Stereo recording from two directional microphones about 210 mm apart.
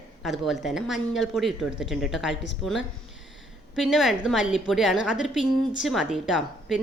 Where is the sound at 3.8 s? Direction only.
Centre (ahead or behind).